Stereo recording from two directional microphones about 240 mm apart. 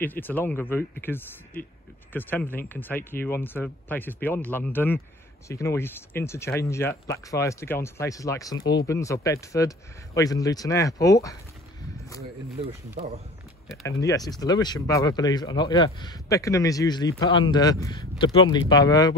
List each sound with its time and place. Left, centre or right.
0.0 s speech: centre
14.0 s speech: centre